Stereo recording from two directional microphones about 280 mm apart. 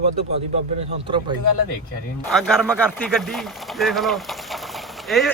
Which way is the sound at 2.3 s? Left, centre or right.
Centre.